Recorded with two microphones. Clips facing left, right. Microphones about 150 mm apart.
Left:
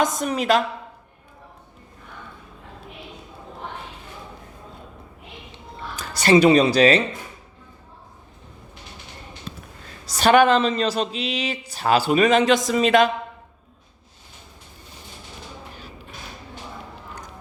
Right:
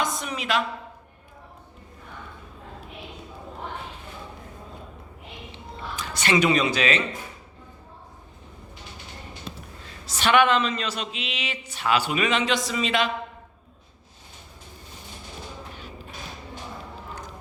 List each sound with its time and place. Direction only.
0.0 s speech: 40° left (ahead or behind)
6.0 s a woman's voice: 35° left (ahead or behind)
10.1 s speech: 40° left (ahead or behind)